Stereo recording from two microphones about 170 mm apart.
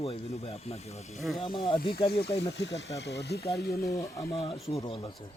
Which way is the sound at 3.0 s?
80° left.